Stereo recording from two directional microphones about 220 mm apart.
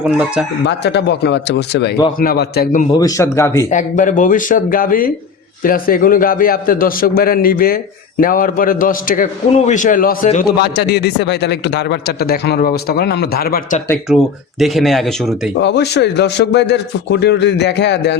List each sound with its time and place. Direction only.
0.0 s speech: 5° right (ahead or behind)
0.6 s a man's voice: 50° left (ahead or behind)
2.9 s speech: 15° left (ahead or behind)
3.7 s a man's voice: 35° left (ahead or behind)
14.6 s speech: centre (ahead or behind)
15.5 s a man's voice: 50° left (ahead or behind)